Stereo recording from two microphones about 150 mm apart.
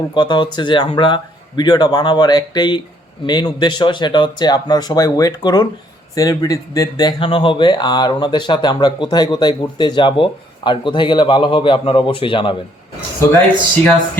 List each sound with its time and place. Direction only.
0.1 s speech: 30° left (ahead or behind)